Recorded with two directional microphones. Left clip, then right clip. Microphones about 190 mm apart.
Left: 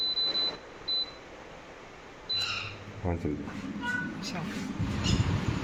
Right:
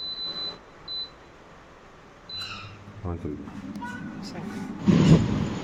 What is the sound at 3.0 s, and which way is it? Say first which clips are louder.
Speech: left 3 dB; centre (ahead or behind).